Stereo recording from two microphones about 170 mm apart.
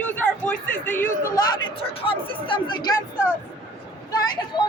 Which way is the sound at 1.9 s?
30° left (ahead or behind).